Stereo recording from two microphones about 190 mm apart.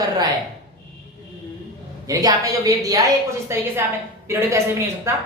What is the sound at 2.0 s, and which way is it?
A man's voice, 20° right (ahead or behind).